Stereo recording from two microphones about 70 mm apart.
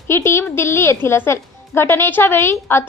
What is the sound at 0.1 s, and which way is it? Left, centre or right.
A woman's voice, left.